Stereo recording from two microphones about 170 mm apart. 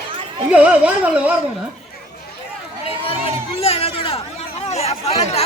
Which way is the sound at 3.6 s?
35° left (ahead or behind).